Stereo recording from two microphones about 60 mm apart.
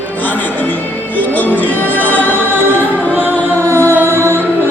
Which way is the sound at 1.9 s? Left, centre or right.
Left.